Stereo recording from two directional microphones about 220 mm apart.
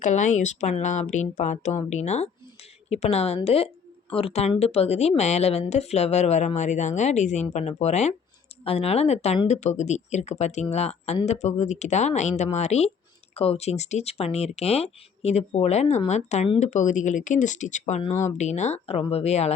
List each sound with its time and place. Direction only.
0.0 s speech: 35° left (ahead or behind)